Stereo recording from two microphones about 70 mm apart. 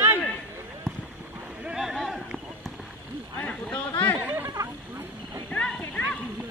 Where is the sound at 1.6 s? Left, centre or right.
Centre.